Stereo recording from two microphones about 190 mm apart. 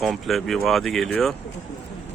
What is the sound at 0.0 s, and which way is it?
Speech, centre (ahead or behind).